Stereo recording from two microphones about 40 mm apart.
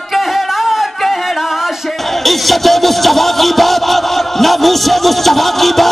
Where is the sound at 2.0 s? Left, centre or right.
Centre.